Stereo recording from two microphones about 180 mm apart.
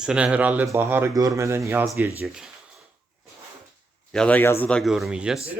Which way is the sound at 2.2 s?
Centre (ahead or behind).